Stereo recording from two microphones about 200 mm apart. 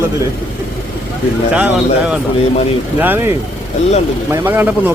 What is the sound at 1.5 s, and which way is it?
Speech, 5° right (ahead or behind).